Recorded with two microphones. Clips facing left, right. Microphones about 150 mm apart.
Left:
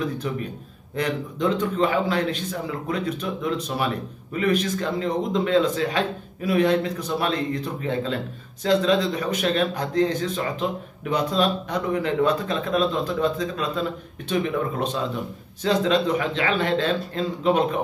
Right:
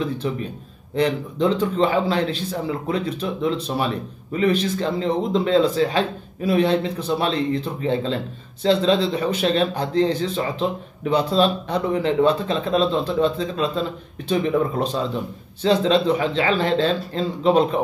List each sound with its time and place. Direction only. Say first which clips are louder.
0.0 s a man's voice: right 2 dB; 30° right (ahead or behind)
15.6 s a man's voice: right 3 dB; 30° right (ahead or behind)